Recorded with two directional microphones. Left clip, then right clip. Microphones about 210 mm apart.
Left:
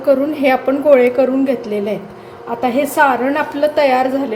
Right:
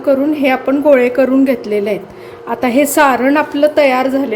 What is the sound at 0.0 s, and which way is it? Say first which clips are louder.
A woman's voice: right 1 dB; 10° right (ahead or behind).